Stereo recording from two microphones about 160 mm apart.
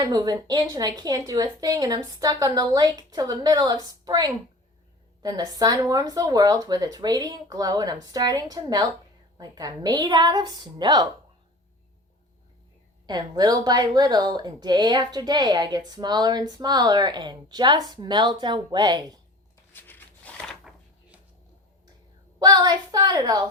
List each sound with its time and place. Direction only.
0.0 s a woman's voice: 25° right (ahead or behind)
13.1 s a woman's voice: 25° right (ahead or behind)
19.7 s a sound: 10° left (ahead or behind)
22.4 s a woman's voice: 25° right (ahead or behind)